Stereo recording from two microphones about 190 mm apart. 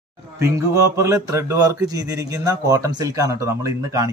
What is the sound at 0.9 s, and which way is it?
Speech, 15° right (ahead or behind).